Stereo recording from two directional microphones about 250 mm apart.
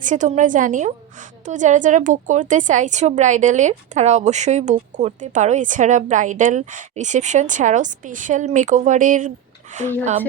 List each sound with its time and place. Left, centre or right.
0.0 s a woman's voice: right